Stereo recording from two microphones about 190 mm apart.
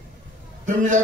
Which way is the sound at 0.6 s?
40° right (ahead or behind).